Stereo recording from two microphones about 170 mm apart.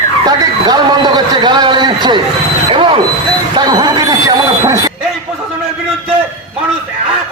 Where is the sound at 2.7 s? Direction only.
30° right (ahead or behind).